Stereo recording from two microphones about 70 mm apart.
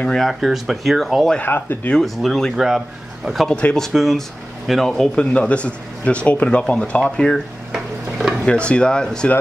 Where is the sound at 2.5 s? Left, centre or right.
Centre.